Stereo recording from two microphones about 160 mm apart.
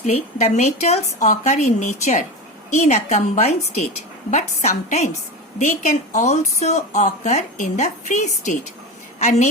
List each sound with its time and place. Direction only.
0.0 s a woman's voice: 45° left (ahead or behind)